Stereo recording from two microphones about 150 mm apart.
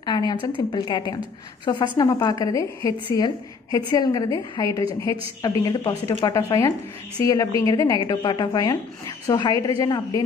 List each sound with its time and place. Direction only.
0.0 s a woman's voice: 30° left (ahead or behind)